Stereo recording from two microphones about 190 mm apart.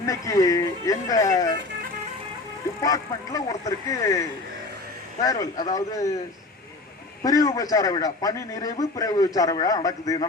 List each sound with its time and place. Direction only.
0.0 s speech: 15° left (ahead or behind)
2.8 s a man's voice: 20° left (ahead or behind)
7.2 s a man's voice: 20° left (ahead or behind)